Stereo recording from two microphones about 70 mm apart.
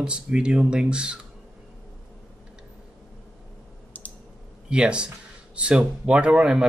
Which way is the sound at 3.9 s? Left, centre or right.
Left.